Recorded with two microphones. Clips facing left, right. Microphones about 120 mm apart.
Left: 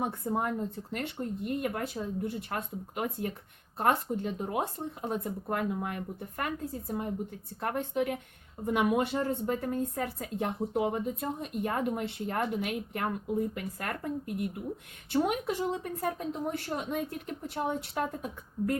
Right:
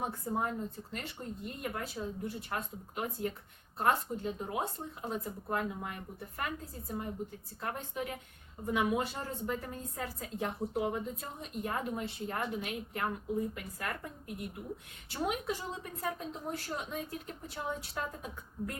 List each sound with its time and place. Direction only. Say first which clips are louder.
0.2 s a woman's voice: left 3 dB; 60° left (ahead or behind)